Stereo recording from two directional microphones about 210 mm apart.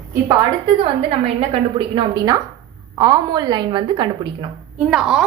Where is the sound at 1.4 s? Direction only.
25° right (ahead or behind).